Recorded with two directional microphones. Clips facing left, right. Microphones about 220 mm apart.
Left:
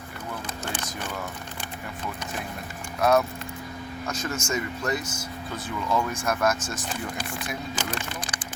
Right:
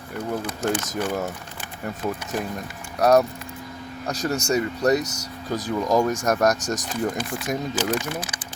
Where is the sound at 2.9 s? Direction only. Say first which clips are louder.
Right 4 dB; 40° right (ahead or behind).